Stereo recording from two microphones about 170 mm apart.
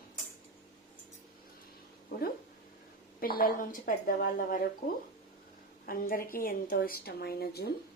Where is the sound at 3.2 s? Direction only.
60° left (ahead or behind).